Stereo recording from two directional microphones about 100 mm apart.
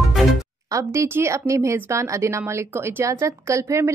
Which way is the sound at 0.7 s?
30° right (ahead or behind).